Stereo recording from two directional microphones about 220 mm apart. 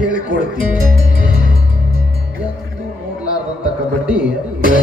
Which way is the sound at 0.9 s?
40° left (ahead or behind).